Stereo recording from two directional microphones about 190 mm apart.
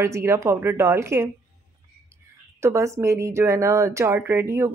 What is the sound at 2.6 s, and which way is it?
A woman's voice, 15° right (ahead or behind).